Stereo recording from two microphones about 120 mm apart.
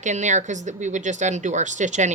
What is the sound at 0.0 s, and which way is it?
Speech, 80° right.